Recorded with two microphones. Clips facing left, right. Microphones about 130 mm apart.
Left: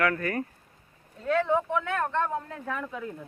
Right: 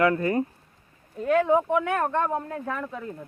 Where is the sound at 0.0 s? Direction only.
20° right (ahead or behind).